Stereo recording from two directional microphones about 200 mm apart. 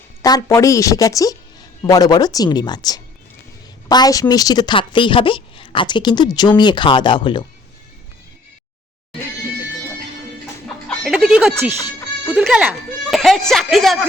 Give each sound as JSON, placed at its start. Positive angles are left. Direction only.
{"t": 0.2, "sound": "a woman's voice", "side_deg": 15}
{"t": 10.8, "sound": "music", "side_deg": 0}
{"t": 12.3, "sound": "speech", "side_deg": -5}